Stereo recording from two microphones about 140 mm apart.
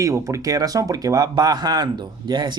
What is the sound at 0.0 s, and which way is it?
Speech, 20° right (ahead or behind).